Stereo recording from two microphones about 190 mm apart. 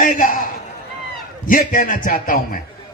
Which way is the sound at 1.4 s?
45° left (ahead or behind).